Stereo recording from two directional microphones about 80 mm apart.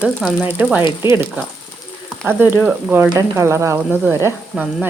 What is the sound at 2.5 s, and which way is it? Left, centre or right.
Speech, right.